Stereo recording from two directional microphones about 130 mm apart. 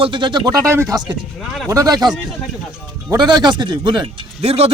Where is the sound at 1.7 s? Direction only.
30° right (ahead or behind).